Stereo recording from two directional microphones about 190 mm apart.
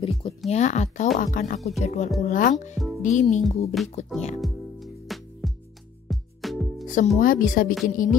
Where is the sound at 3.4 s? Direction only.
Centre (ahead or behind).